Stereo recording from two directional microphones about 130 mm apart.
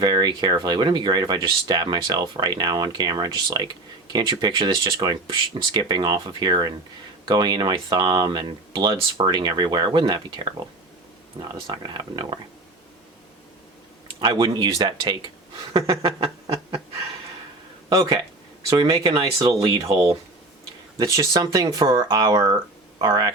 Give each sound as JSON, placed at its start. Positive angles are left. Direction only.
{"t": 0.0, "sound": "speech", "side_deg": -35}
{"t": 14.2, "sound": "speech", "side_deg": -35}
{"t": 16.0, "sound": "a sound", "side_deg": -45}
{"t": 17.8, "sound": "speech", "side_deg": -30}
{"t": 19.2, "sound": "speech", "side_deg": -30}